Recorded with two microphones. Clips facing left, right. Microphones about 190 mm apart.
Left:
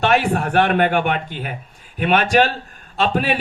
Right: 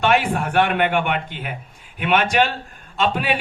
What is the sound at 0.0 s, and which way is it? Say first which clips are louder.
A man's voice: left 1 dB; 40° left (ahead or behind).